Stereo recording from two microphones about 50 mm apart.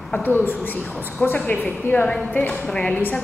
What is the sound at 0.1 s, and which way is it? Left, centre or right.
A woman's voice, left.